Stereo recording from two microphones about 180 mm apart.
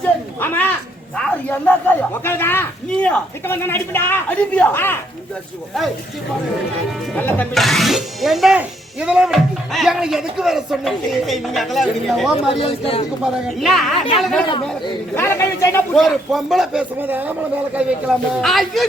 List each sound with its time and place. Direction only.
0.3 s speech: 10° left (ahead or behind)
7.2 s speech: 10° left (ahead or behind)
7.5 s speech: centre (ahead or behind)
12.5 s speech: 30° left (ahead or behind)
13.6 s speech: centre (ahead or behind)
15.1 s speech: 15° left (ahead or behind)
16.0 s speech: centre (ahead or behind)